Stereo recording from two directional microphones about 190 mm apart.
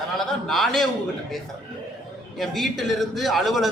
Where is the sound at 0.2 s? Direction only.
Centre (ahead or behind).